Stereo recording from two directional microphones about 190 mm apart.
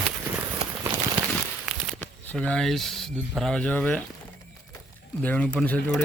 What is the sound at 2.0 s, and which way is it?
Speech, 5° left (ahead or behind).